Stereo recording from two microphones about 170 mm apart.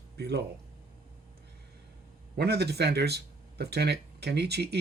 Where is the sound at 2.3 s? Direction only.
70° right (ahead or behind).